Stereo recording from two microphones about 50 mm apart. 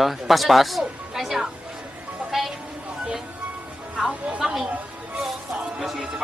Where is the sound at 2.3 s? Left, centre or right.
Centre.